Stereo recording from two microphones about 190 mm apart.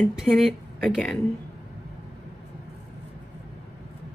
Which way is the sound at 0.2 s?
Centre (ahead or behind).